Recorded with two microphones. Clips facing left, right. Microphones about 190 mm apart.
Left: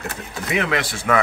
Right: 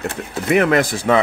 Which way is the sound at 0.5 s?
50° right (ahead or behind).